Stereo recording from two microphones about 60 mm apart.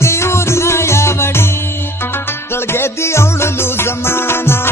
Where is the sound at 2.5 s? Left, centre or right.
Left.